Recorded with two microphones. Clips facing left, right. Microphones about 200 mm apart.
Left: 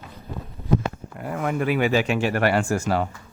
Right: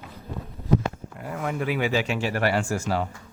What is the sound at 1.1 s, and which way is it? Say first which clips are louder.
Speech: left 6 dB; 55° left (ahead or behind).